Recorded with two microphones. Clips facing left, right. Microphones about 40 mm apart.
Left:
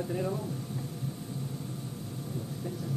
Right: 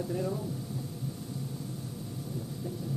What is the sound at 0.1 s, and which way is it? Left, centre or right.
Speech, left.